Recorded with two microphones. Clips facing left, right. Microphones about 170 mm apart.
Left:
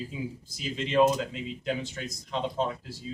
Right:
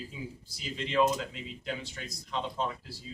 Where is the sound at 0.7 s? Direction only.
25° left (ahead or behind).